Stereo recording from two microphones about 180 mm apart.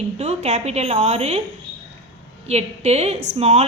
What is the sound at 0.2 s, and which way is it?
A woman's voice, 40° right (ahead or behind).